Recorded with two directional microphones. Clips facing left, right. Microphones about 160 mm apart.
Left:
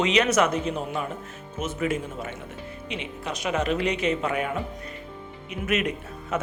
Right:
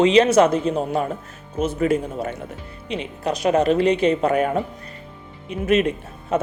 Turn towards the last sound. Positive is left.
turn(degrees=-30)  # may be behind; listen again after turning